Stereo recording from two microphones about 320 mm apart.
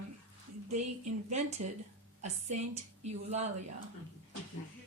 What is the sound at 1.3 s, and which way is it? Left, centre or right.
A woman's voice, right.